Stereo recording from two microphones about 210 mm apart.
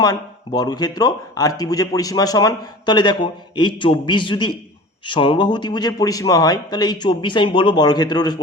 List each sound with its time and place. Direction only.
0.0 s speech: 20° left (ahead or behind)